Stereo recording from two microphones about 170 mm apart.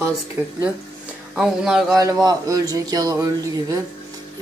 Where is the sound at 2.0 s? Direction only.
20° right (ahead or behind).